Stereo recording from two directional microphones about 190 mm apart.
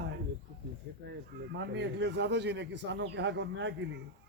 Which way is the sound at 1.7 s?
65° right (ahead or behind).